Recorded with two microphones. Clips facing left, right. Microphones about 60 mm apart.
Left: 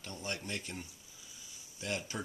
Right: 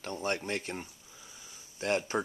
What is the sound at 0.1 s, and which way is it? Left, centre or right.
Speech, right.